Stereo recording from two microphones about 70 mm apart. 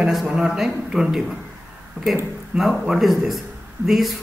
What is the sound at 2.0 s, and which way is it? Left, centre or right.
Speech, centre.